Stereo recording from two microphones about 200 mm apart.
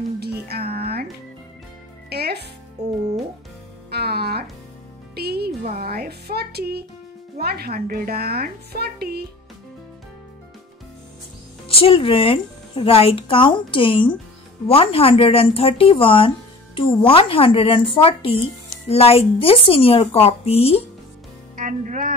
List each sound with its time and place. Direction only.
0.2 s music: 50° right (ahead or behind)
2.0 s music: 50° right (ahead or behind)
7.3 s a woman's voice: 50° right (ahead or behind)
11.6 s speech: 30° left (ahead or behind)
21.5 s speech: 40° right (ahead or behind)